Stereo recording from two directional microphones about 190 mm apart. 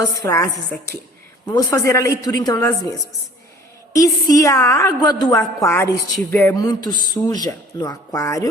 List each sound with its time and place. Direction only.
0.0 s a woman's voice: 15° left (ahead or behind)
1.5 s a woman's voice: 15° left (ahead or behind)
3.9 s a woman's voice: 20° left (ahead or behind)